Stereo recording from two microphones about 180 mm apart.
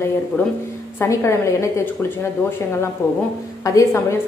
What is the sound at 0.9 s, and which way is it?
A woman's voice, 15° left (ahead or behind).